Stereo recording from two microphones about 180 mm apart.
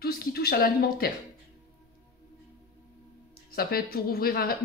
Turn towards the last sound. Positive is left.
turn(degrees=60)  # may be behind; listen again after turning